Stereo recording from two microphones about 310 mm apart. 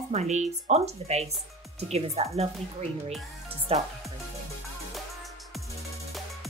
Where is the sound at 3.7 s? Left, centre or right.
Centre.